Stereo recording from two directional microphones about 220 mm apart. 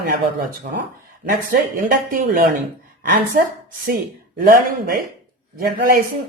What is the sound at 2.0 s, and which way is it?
Speech, 40° right (ahead or behind).